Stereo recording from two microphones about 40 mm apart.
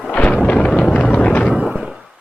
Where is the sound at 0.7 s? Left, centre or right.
Centre.